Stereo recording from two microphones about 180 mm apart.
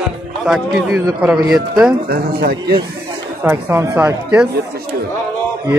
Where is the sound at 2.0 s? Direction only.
60° right (ahead or behind).